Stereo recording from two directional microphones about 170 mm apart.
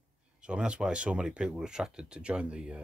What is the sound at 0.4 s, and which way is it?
Speech, 5° right (ahead or behind).